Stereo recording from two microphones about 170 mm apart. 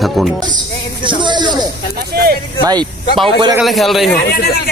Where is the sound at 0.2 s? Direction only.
Centre (ahead or behind).